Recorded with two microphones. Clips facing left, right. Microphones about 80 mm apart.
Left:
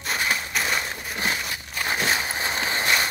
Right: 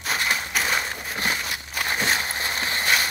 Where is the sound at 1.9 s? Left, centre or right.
Centre; by 2.9 s left.